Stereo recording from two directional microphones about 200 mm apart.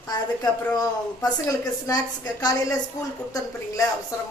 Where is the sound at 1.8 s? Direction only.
20° left (ahead or behind).